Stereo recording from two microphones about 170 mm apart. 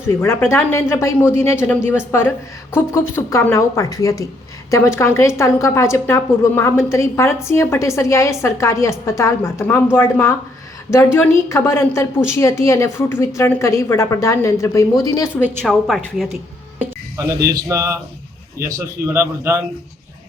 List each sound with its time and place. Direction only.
0.1 s a woman's voice: 15° left (ahead or behind)
15.6 s a woman's voice: centre (ahead or behind)
17.5 s a man's voice: 15° right (ahead or behind)